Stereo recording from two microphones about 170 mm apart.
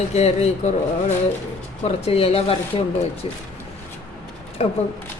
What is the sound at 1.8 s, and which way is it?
Speech, 35° left (ahead or behind).